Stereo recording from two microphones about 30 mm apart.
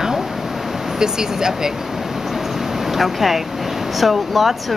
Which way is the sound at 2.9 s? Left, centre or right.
Centre.